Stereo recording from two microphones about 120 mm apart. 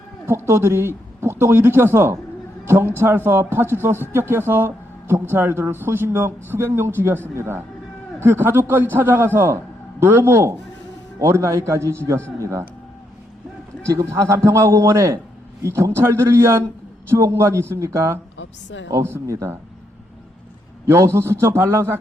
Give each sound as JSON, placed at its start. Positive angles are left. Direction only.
{"t": 0.3, "sound": "a man's voice", "side_deg": -20}
{"t": 13.8, "sound": "a man's voice", "side_deg": -25}
{"t": 20.8, "sound": "a man's voice", "side_deg": -25}